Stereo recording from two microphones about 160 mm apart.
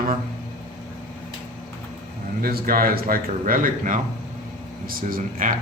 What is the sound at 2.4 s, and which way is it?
Speech, 65° right (ahead or behind).